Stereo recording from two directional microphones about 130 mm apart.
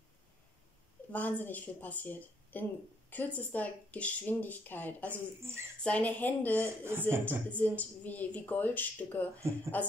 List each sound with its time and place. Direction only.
1.1 s speech: 15° left (ahead or behind)
5.1 s a woman's voice: 20° right (ahead or behind)
5.9 s speech: 10° left (ahead or behind)
6.6 s a woman's voice: 20° right (ahead or behind)
7.5 s speech: 10° left (ahead or behind)